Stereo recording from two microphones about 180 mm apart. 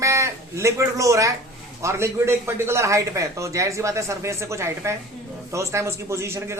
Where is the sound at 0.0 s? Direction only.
15° right (ahead or behind).